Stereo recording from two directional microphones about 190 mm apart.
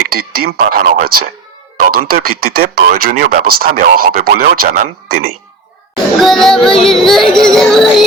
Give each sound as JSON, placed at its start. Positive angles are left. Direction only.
{"t": 0.2, "sound": "speech", "side_deg": -50}
{"t": 6.2, "sound": "music", "side_deg": 0}